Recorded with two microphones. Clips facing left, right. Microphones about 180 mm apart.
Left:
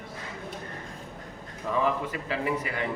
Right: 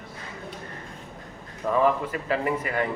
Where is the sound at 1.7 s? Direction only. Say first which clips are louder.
Right 4 dB; 45° right (ahead or behind).